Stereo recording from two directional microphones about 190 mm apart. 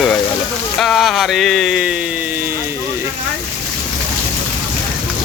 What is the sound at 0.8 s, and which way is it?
Speech, centre (ahead or behind).